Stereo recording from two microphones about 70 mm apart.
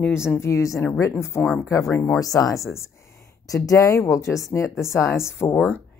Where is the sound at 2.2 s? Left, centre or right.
Left.